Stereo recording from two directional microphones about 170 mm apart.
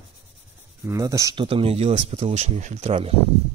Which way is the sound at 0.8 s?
20° right (ahead or behind).